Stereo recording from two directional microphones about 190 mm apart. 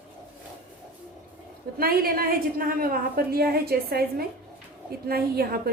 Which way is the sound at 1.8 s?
50° right (ahead or behind).